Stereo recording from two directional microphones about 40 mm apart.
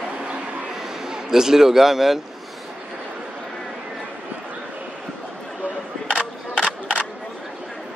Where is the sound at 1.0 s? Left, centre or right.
Centre.